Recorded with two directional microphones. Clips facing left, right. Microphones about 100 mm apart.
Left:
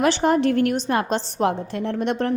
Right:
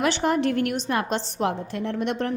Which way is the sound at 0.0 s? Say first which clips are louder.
Left 4 dB; 35° left (ahead or behind).